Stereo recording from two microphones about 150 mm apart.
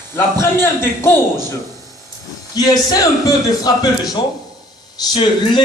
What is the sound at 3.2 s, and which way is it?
Speech, 25° left (ahead or behind).